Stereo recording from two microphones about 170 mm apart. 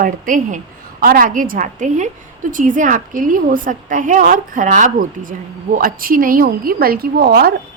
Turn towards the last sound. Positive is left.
turn(degrees=-65)  # may be behind; listen again after turning